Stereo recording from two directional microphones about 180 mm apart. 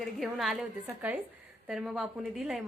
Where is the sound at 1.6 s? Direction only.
Centre (ahead or behind).